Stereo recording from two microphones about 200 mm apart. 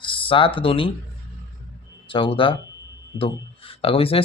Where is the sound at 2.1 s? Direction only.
25° left (ahead or behind).